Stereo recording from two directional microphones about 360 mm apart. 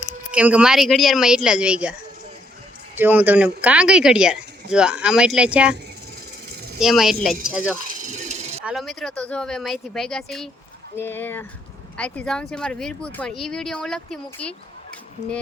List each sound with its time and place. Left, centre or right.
0.3 s speech: centre
6.7 s speech: centre
7.9 s a sound: right
8.6 s speech: centre